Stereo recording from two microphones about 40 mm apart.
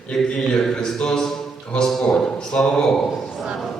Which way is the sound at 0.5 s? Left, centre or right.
Centre.